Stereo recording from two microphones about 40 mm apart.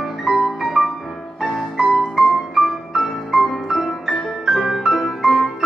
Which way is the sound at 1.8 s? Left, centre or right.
Right.